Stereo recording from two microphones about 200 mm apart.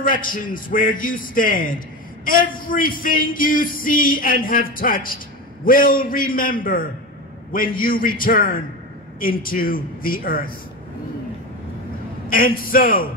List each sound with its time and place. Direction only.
0.0 s speech: 45° left (ahead or behind)
12.3 s speech: 45° left (ahead or behind)